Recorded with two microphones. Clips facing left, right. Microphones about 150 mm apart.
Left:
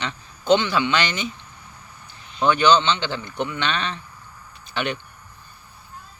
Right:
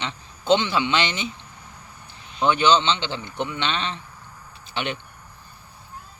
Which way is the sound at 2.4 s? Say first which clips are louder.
Left 1 dB; 25° right (ahead or behind).